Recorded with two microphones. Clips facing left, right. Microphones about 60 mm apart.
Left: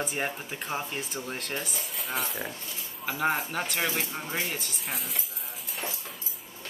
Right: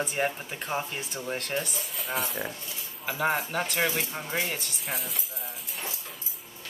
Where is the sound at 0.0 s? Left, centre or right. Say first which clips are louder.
Right 3 dB; centre.